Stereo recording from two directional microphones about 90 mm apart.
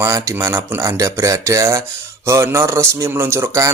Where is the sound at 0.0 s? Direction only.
35° right (ahead or behind).